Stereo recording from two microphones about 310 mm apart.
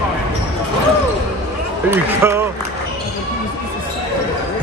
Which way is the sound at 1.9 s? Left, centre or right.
Centre.